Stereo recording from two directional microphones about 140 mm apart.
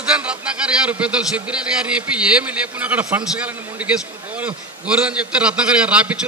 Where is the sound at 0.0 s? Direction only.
5° right (ahead or behind).